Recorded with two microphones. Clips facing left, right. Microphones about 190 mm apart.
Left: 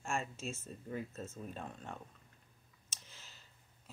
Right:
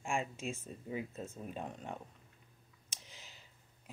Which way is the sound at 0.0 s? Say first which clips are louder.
Right 2 dB; 15° right (ahead or behind).